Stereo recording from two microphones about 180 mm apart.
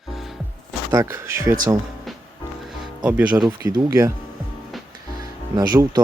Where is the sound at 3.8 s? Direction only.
20° right (ahead or behind).